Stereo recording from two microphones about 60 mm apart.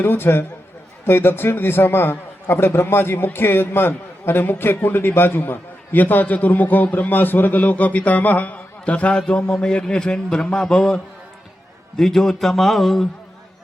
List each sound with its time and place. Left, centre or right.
0.0 s a man's voice: left; by 13.1 s centre